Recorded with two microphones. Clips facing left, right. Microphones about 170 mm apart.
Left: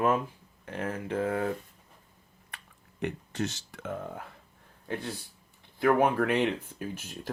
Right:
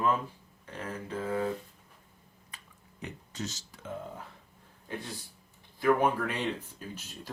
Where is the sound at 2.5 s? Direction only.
60° left (ahead or behind).